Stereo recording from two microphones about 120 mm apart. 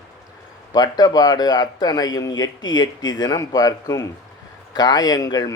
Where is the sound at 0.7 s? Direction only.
35° left (ahead or behind).